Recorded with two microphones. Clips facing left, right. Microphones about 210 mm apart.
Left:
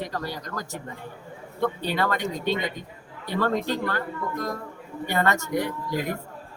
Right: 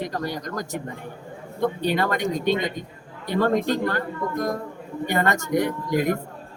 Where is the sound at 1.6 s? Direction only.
15° right (ahead or behind).